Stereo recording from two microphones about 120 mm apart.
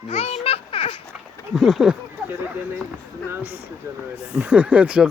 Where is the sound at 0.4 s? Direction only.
50° left (ahead or behind).